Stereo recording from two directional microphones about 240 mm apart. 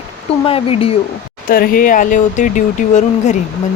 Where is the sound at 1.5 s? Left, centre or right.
Left.